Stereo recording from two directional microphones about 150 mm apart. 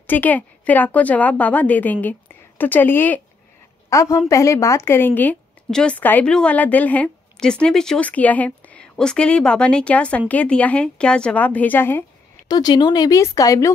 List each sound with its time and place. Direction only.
0.0 s a woman's voice: 10° left (ahead or behind)
12.4 s speech: 25° left (ahead or behind)